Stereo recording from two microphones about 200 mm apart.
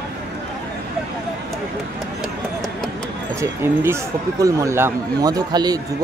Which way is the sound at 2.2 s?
Centre (ahead or behind).